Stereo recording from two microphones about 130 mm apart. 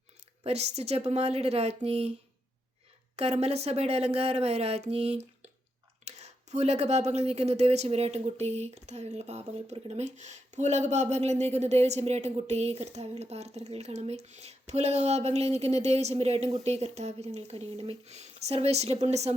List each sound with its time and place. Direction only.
0.4 s a woman's voice: 55° right (ahead or behind)
3.2 s a woman's voice: 55° right (ahead or behind)